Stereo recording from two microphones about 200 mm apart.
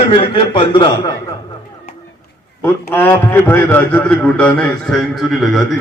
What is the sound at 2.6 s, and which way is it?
A man's voice, 10° left (ahead or behind).